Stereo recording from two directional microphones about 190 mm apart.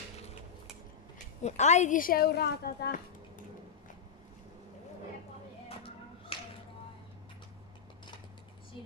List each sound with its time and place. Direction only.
1.4 s a woman's voice: 40° left (ahead or behind); by 3.0 s 55° left (ahead or behind)
6.3 s tap: 30° left (ahead or behind)